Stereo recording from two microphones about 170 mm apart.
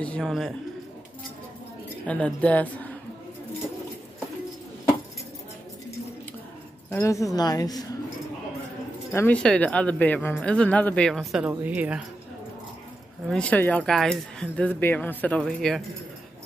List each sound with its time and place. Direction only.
0.0 s a man's voice: 5° left (ahead or behind)
2.0 s speech: 10° left (ahead or behind)
6.9 s a woman's voice: 15° left (ahead or behind)
9.1 s speech: 10° left (ahead or behind); by 12.0 s 10° right (ahead or behind)
13.3 s speech: 10° left (ahead or behind)